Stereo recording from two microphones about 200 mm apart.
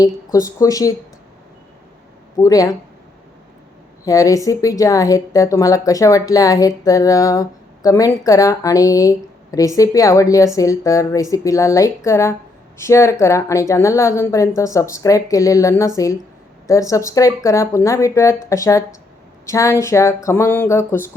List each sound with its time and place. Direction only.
0.3 s speech: 15° left (ahead or behind)
2.4 s speech: 15° left (ahead or behind)
4.0 s speech: 15° left (ahead or behind)